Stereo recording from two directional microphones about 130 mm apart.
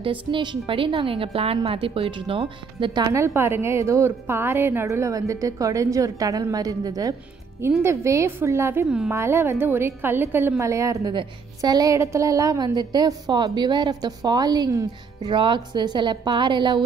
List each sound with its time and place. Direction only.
0.3 s a woman's voice: 35° right (ahead or behind)
3.1 s a woman's voice: 20° right (ahead or behind); by 16.8 s 35° right (ahead or behind)